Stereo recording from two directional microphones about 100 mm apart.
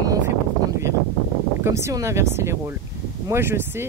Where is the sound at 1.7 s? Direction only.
30° right (ahead or behind).